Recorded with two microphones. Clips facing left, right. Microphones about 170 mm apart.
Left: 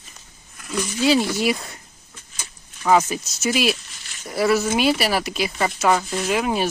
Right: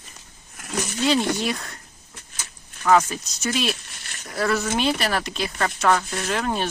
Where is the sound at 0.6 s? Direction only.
60° right (ahead or behind).